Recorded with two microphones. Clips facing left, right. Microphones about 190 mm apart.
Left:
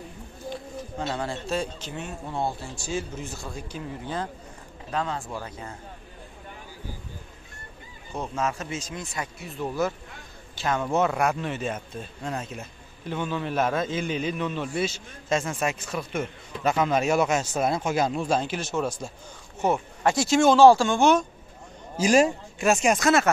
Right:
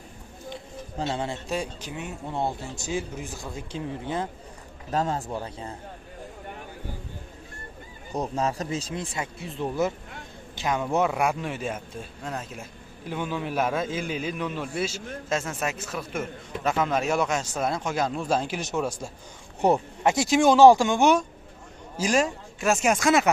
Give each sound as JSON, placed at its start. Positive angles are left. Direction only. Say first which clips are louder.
{"t": 0.9, "sound": "speech", "louder": "right 1 dB", "side_deg": -25}
{"t": 4.9, "sound": "speech", "louder": "right 3 dB", "side_deg": -40}
{"t": 5.3, "sound": "speech", "louder": "right 2 dB", "side_deg": -30}
{"t": 8.1, "sound": "a man's voice", "louder": "right 2 dB", "side_deg": -35}
{"t": 20.0, "sound": "speech", "louder": "even", "side_deg": -15}
{"t": 22.0, "sound": "a man's voice", "louder": "left 4 dB", "side_deg": 10}
{"t": 22.8, "sound": "speech", "louder": "right 2 dB", "side_deg": -5}